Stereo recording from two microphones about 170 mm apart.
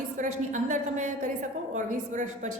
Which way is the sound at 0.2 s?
50° right (ahead or behind).